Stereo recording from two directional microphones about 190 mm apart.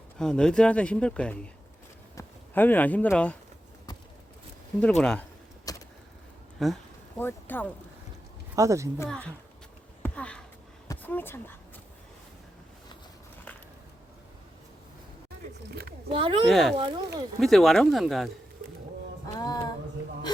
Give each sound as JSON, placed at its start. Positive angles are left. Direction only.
{"t": 0.2, "sound": "speech", "side_deg": 5}
{"t": 4.8, "sound": "speech", "side_deg": 5}
{"t": 5.7, "sound": "vehicle", "side_deg": 20}
{"t": 6.6, "sound": "speech", "side_deg": 0}
{"t": 8.5, "sound": "speech", "side_deg": -15}
{"t": 9.0, "sound": "speech", "side_deg": 5}
{"t": 10.0, "sound": "a sound", "side_deg": 5}
{"t": 10.8, "sound": "speech", "side_deg": 10}
{"t": 16.0, "sound": "speech", "side_deg": -30}
{"t": 16.5, "sound": "speech", "side_deg": 0}
{"t": 19.4, "sound": "music", "side_deg": 20}